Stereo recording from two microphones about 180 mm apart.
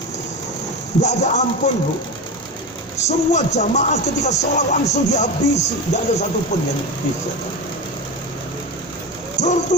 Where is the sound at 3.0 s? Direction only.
40° left (ahead or behind).